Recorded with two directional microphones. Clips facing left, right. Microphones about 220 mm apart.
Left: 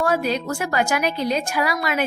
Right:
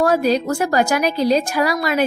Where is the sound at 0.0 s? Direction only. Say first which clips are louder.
Right 5 dB; 40° right (ahead or behind).